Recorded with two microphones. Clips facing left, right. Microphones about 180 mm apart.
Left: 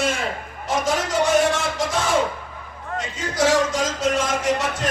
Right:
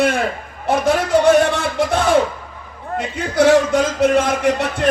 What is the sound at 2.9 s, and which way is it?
Speech, 60° right (ahead or behind).